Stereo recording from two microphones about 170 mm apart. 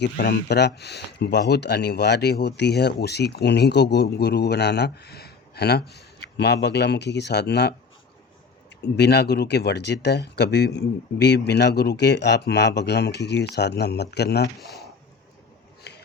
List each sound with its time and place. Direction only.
0.0 s speech: 75° left (ahead or behind)
8.8 s speech: 80° left
15.8 s a sound: 75° left (ahead or behind)